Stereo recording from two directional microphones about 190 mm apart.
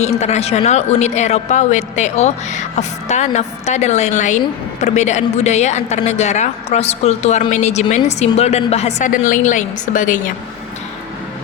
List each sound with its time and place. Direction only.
0.0 s speech: 35° left (ahead or behind)